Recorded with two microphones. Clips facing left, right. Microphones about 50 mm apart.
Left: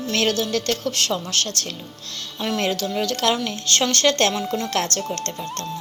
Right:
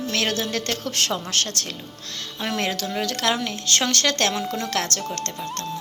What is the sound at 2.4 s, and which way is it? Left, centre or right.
A woman's voice, centre.